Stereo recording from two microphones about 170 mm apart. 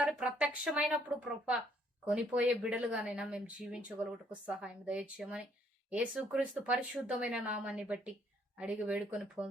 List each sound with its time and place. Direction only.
0.0 s speech: 5° right (ahead or behind)